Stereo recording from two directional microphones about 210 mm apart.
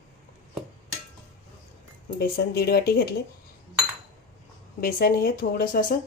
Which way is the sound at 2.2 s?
45° left (ahead or behind).